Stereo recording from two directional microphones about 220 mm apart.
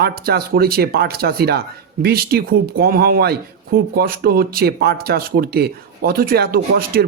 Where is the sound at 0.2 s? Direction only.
45° right (ahead or behind).